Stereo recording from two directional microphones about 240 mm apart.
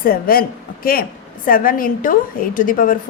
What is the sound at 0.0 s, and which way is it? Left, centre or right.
A woman's voice, left.